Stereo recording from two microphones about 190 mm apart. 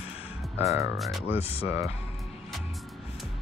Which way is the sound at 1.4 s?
30° left (ahead or behind).